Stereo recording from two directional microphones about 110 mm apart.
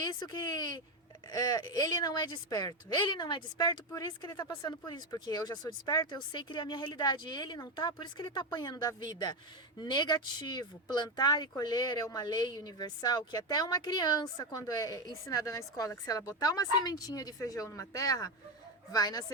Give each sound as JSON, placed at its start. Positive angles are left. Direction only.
{"t": 0.0, "sound": "speech", "side_deg": 40}